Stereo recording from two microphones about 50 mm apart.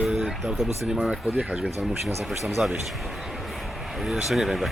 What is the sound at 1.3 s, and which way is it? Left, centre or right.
Speech, right.